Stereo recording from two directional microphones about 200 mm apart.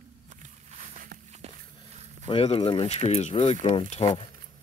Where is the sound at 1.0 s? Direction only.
45° right (ahead or behind).